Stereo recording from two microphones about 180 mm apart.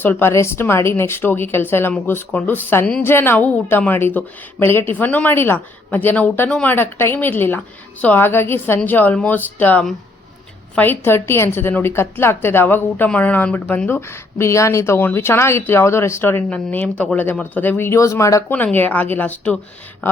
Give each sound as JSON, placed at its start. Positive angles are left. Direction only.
{"t": 0.0, "sound": "a woman's voice", "side_deg": 10}